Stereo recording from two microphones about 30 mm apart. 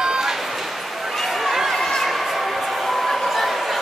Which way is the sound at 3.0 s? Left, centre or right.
Centre.